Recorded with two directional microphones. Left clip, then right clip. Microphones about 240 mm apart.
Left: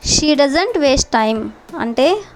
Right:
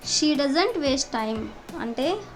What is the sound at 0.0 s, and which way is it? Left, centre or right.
A woman's voice, left.